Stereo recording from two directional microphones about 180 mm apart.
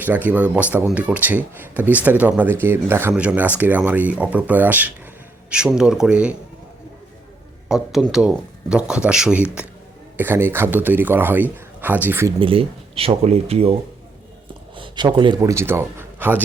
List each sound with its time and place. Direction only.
0.0 s speech: 10° right (ahead or behind)
7.7 s speech: centre (ahead or behind)
12.4 s speech: 30° right (ahead or behind)
14.8 s a man's voice: 25° right (ahead or behind); by 16.4 s 10° right (ahead or behind)